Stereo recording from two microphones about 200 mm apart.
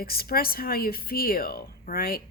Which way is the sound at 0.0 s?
50° left (ahead or behind).